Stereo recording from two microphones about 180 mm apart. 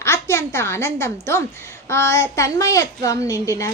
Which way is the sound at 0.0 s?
15° left (ahead or behind).